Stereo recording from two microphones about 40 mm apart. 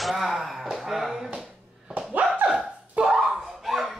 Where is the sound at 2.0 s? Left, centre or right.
Right.